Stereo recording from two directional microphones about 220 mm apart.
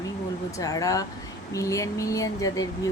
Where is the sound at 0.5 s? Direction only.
15° left (ahead or behind).